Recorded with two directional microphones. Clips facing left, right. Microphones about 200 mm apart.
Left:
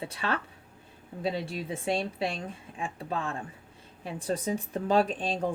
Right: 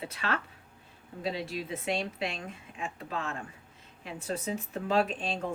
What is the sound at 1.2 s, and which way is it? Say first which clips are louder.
Speech: left 2 dB; 30° left (ahead or behind).